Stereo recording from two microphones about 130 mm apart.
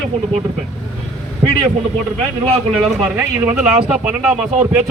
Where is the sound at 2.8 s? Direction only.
10° right (ahead or behind).